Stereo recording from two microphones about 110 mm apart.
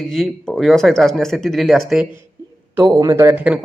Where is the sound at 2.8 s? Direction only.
35° right (ahead or behind).